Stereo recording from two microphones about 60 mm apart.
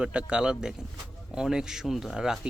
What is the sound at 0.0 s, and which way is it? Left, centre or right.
Speech, centre.